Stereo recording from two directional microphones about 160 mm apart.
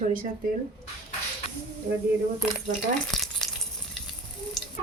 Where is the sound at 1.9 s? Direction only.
45° right (ahead or behind).